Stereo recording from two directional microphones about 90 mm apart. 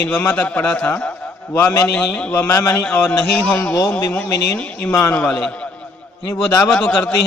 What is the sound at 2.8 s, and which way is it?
Speech, 15° left (ahead or behind).